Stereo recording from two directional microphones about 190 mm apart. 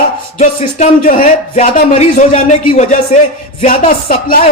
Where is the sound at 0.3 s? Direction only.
40° left (ahead or behind).